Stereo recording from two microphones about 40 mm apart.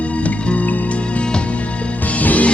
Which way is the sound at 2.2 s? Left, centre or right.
Left.